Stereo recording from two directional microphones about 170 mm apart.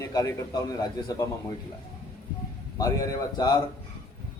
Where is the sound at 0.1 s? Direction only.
20° left (ahead or behind).